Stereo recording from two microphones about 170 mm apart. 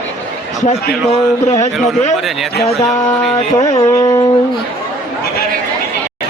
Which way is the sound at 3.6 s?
25° left (ahead or behind).